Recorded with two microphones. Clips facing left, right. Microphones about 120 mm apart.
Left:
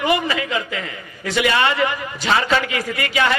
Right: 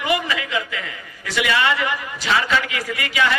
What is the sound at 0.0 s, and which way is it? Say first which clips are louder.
A man's voice: left 3 dB; 30° left (ahead or behind).